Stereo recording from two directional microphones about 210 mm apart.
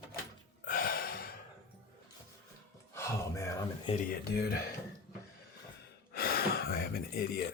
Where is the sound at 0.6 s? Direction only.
40° left (ahead or behind).